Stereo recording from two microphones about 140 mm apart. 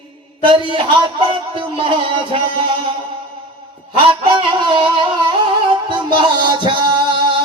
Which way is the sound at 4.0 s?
35° right (ahead or behind).